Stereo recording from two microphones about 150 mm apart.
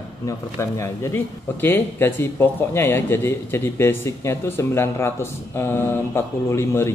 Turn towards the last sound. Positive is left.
turn(degrees=20)  # may be behind; listen again after turning